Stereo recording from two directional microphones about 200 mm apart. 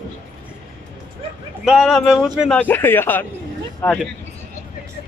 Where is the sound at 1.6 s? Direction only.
5° right (ahead or behind).